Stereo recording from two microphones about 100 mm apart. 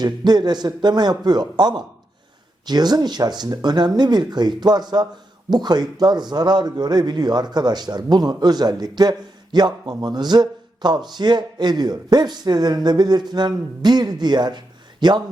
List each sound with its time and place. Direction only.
0.0 s speech: 45° right (ahead or behind)